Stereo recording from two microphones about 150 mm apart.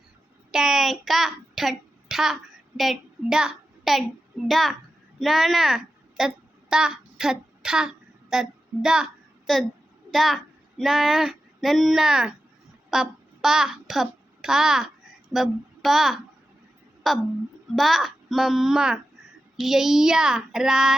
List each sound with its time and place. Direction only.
0.5 s a child's voice: 5° right (ahead or behind)